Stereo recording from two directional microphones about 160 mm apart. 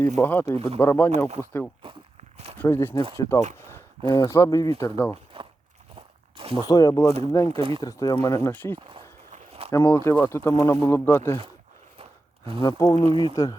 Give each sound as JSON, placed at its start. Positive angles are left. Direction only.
{"t": 0.2, "sound": "speech", "side_deg": 10}
{"t": 5.3, "sound": "a sound", "side_deg": -35}
{"t": 6.7, "sound": "speech", "side_deg": 20}
{"t": 9.3, "sound": "a sound", "side_deg": -40}
{"t": 9.9, "sound": "speech", "side_deg": 15}
{"t": 12.6, "sound": "speech", "side_deg": 25}
{"t": 13.0, "sound": "speech", "side_deg": -40}
{"t": 13.2, "sound": "speech", "side_deg": 20}